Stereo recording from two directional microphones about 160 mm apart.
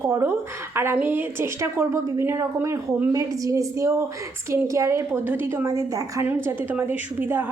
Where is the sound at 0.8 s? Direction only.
15° right (ahead or behind).